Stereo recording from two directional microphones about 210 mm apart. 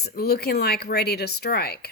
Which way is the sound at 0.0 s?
50° left (ahead or behind).